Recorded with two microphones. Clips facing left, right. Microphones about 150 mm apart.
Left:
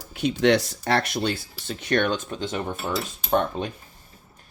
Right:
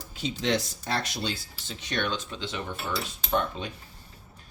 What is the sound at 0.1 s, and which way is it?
Speech, 65° left (ahead or behind).